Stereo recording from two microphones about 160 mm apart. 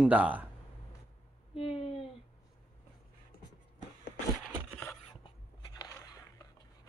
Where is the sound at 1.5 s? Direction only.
35° left (ahead or behind).